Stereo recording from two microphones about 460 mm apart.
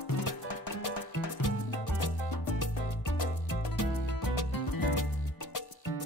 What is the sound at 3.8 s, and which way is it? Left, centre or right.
Music, left.